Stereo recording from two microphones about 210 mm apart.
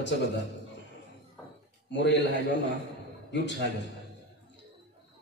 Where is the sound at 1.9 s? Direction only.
60° left (ahead or behind).